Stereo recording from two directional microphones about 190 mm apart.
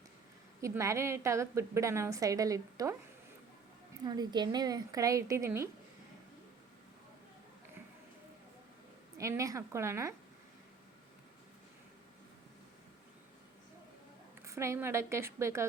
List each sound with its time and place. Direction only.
0.6 s a woman's voice: 15° right (ahead or behind)
4.0 s speech: 20° right (ahead or behind)
9.1 s a woman's voice: 15° right (ahead or behind)
14.4 s a woman's voice: 15° right (ahead or behind)